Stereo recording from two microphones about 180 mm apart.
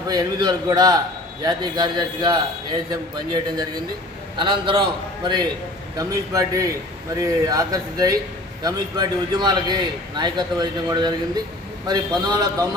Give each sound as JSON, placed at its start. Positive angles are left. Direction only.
{"t": 0.1, "sound": "a man's voice", "side_deg": -20}
{"t": 6.0, "sound": "a man's voice", "side_deg": -20}